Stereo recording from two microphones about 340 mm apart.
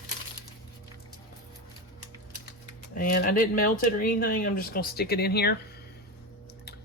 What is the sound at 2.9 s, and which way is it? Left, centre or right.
Speech, left.